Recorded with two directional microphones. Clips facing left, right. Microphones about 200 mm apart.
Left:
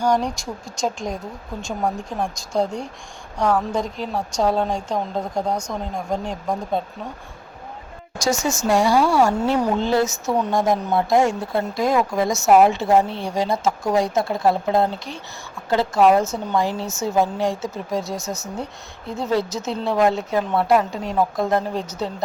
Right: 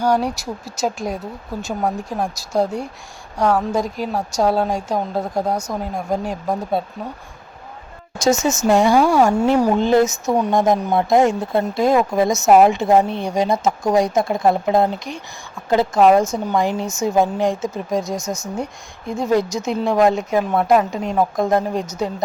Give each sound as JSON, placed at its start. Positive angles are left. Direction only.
{"t": 0.0, "sound": "speech", "side_deg": -5}
{"t": 8.2, "sound": "speech", "side_deg": -20}